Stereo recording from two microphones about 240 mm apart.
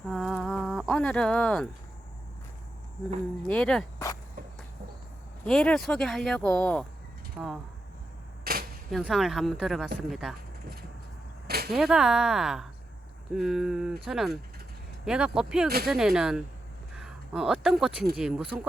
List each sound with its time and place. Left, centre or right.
0.0 s a sound: centre
3.4 s speech: centre
5.5 s speech: centre
8.5 s cap gun: right
8.9 s speech: centre
11.4 s a sound: right
11.7 s speech: centre